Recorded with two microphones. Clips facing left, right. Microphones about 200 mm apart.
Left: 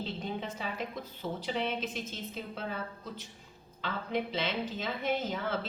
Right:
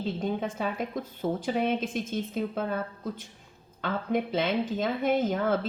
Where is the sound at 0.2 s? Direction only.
50° right (ahead or behind).